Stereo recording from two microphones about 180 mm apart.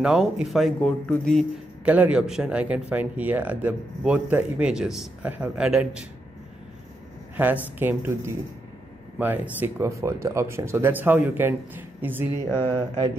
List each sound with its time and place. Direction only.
0.0 s speech: 5° right (ahead or behind)
1.9 s speech: 5° right (ahead or behind)
7.4 s speech: 10° right (ahead or behind)
12.4 s a sound: 10° left (ahead or behind)